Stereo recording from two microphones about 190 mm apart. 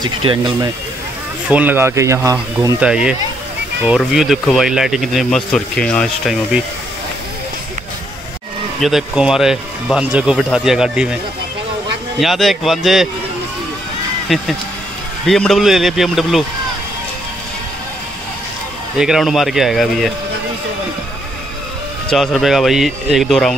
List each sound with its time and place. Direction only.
0.0 s speech: 25° right (ahead or behind)
1.5 s speech: 10° right (ahead or behind)
8.8 s speech: 5° right (ahead or behind)
12.2 s speech: centre (ahead or behind)
14.3 s speech: centre (ahead or behind)
18.9 s speech: centre (ahead or behind)
22.1 s speech: centre (ahead or behind)